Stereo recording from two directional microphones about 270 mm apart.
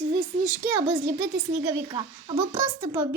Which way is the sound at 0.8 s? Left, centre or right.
Centre.